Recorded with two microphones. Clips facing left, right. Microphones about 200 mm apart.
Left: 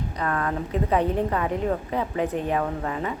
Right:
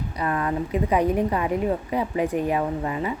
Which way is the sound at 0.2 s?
10° right (ahead or behind).